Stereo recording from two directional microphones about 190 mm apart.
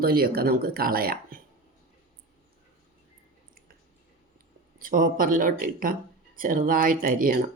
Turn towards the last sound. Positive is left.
turn(degrees=-45)  # may be behind; listen again after turning